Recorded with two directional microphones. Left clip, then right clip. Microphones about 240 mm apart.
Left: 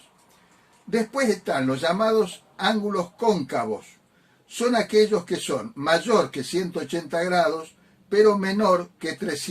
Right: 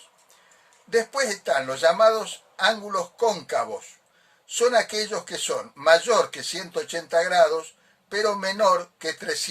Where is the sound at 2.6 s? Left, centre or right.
Right.